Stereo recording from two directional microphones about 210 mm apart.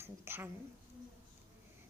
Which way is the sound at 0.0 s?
10° right (ahead or behind).